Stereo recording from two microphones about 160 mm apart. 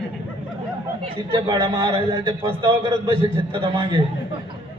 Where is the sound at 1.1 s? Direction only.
35° right (ahead or behind).